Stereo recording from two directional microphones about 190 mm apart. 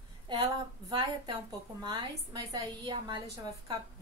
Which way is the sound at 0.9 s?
25° right (ahead or behind).